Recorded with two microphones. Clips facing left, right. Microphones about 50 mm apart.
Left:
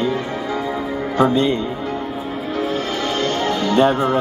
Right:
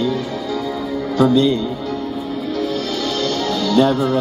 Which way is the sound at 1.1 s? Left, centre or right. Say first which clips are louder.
Right 2 dB; left.